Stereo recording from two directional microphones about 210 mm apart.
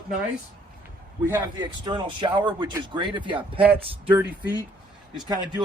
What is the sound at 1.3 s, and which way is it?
Speech, 20° right (ahead or behind).